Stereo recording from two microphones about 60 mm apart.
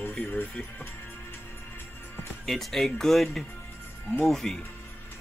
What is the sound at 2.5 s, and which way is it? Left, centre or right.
Speech, centre.